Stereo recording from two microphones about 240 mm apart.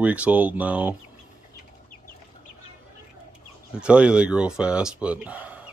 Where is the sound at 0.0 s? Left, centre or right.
Centre.